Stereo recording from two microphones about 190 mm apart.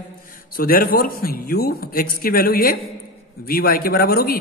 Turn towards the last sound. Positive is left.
turn(degrees=50)  # may be behind; listen again after turning